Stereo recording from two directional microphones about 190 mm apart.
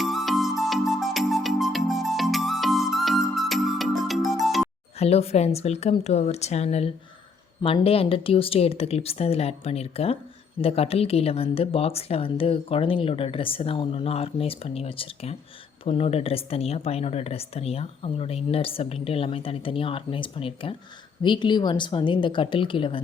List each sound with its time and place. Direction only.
0.0 s music: centre (ahead or behind)
4.9 s a woman's voice: 35° left (ahead or behind)